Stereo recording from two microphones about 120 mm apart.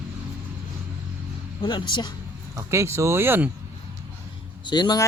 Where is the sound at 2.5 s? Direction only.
25° right (ahead or behind).